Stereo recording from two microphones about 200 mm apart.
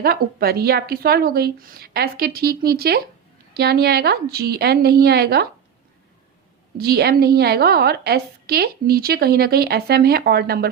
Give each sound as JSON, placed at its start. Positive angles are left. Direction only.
{"t": 0.0, "sound": "a woman's voice", "side_deg": -50}
{"t": 6.7, "sound": "a woman's voice", "side_deg": -50}